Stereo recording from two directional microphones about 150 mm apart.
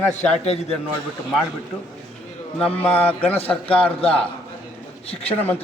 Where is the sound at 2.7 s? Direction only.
10° left (ahead or behind).